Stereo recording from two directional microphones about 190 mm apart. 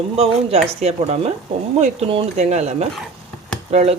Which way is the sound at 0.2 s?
35° right (ahead or behind).